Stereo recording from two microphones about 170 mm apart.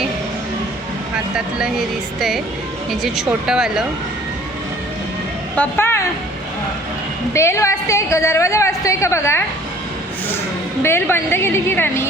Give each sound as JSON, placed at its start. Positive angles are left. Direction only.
{"t": 3.0, "sound": "speech", "side_deg": -5}
{"t": 5.5, "sound": "a woman's voice", "side_deg": 15}
{"t": 7.3, "sound": "a woman's voice", "side_deg": 15}
{"t": 10.8, "sound": "a woman's voice", "side_deg": 15}